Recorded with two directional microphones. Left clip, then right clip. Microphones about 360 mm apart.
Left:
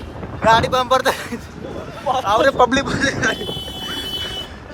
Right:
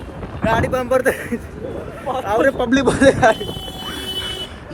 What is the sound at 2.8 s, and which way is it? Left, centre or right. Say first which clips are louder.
Speech: right 7 dB; centre.